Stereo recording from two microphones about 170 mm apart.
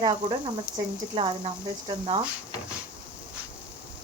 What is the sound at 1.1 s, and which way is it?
Speech, 30° right (ahead or behind).